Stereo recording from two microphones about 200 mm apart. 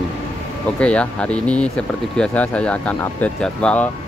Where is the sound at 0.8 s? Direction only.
5° left (ahead or behind).